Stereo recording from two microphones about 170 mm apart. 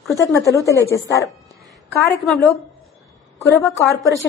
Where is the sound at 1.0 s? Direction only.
20° left (ahead or behind).